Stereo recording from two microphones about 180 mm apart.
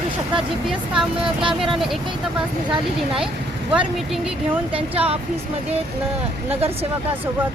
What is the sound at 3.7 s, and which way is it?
Speech, 5° right (ahead or behind).